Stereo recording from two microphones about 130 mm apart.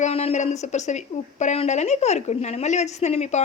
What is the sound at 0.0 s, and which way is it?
A woman's voice, 55° left (ahead or behind).